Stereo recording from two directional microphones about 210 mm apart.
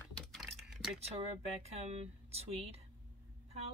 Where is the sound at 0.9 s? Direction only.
30° right (ahead or behind).